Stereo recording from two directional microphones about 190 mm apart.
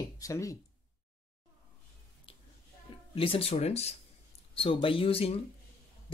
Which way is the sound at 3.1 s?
30° left (ahead or behind).